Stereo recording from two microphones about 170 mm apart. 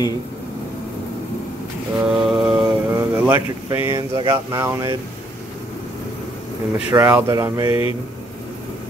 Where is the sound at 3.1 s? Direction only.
15° right (ahead or behind).